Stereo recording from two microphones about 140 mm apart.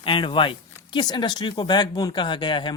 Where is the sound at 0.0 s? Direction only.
35° left (ahead or behind).